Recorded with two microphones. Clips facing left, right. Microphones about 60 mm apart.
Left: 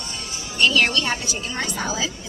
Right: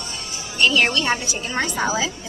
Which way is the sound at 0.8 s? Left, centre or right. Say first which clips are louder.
Right 1 dB; centre.